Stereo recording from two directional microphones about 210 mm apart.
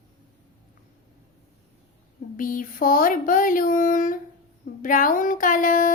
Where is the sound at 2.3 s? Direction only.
40° left (ahead or behind).